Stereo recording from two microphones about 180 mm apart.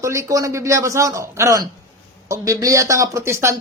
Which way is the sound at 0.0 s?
15° right (ahead or behind).